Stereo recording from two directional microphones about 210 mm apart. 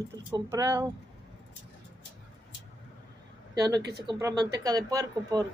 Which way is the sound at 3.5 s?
20° right (ahead or behind).